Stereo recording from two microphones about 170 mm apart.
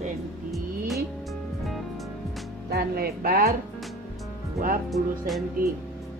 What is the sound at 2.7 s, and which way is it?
Speech, 65° right (ahead or behind).